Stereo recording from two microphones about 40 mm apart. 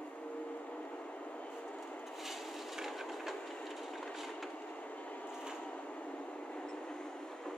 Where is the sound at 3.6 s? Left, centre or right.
Centre.